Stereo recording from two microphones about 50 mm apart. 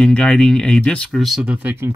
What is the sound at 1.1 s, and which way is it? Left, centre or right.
Speech, centre.